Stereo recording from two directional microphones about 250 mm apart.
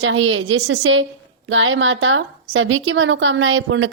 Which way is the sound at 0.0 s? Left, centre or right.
Right.